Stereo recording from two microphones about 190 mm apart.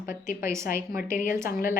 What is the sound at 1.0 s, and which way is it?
Speech, 45° left (ahead or behind).